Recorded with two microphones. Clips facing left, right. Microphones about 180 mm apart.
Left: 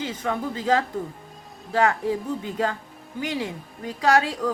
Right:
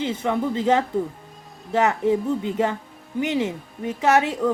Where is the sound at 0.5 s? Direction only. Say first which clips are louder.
Right 2 dB; 25° right (ahead or behind).